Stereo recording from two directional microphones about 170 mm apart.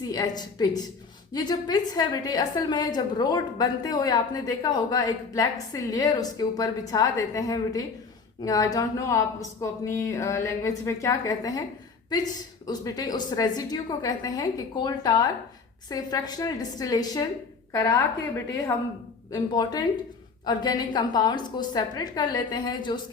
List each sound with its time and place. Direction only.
0.0 s a woman's voice: 25° left (ahead or behind)
12.6 s a woman's voice: 25° left (ahead or behind)
19.3 s a woman's voice: 20° left (ahead or behind)